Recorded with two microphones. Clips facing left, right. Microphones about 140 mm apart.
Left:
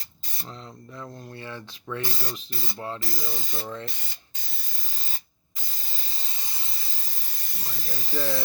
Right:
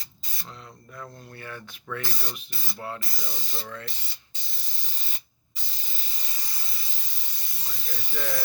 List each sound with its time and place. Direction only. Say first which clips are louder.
0.9 s speech: left 2 dB; 25° left (ahead or behind)
3.3 s speech: left 4 dB; 50° left (ahead or behind)
5.7 s hiss: left 2 dB; 35° left (ahead or behind)
7.5 s speech: left 2 dB; 40° left (ahead or behind)